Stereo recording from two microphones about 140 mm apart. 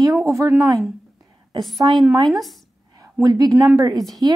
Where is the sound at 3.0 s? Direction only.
25° right (ahead or behind).